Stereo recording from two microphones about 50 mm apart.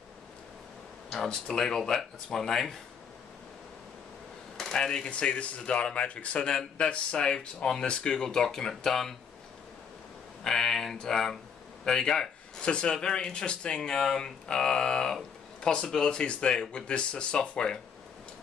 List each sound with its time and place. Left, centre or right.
1.3 s speech: centre
4.6 s speech: centre
10.4 s speech: centre